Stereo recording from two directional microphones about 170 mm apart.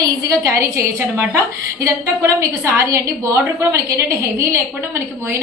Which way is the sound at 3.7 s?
15° right (ahead or behind).